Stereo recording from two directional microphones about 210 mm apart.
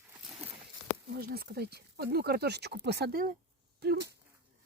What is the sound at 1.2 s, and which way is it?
Speech, 45° right (ahead or behind).